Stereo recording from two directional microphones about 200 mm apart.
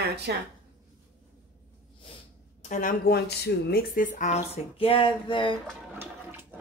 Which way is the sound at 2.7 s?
40° left (ahead or behind).